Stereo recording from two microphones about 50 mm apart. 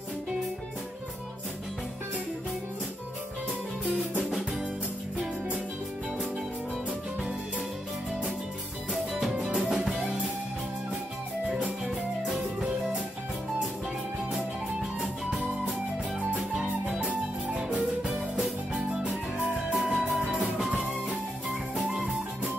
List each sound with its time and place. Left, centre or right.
9.3 s music: centre
11.4 s music: centre
15.0 s music: centre
16.5 s music: centre
17.1 s music: right
18.0 s music: centre